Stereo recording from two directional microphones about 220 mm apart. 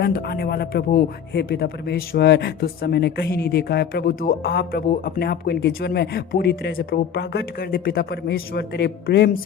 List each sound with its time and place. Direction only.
0.0 s speech: 45° left (ahead or behind)